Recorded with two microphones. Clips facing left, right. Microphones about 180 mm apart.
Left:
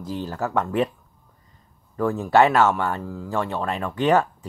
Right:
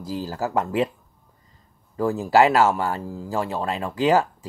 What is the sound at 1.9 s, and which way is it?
Speech, 30° right (ahead or behind).